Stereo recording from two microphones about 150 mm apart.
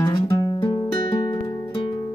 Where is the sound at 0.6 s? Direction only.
35° left (ahead or behind).